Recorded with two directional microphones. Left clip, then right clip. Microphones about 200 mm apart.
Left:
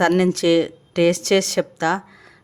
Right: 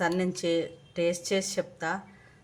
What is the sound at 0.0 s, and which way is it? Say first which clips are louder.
A woman's voice: left 11 dB; 55° left (ahead or behind).